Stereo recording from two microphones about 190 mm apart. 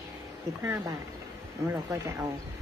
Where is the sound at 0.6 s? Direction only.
15° right (ahead or behind).